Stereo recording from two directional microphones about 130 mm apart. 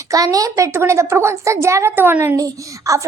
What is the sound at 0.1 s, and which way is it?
A child's voice, 25° right (ahead or behind).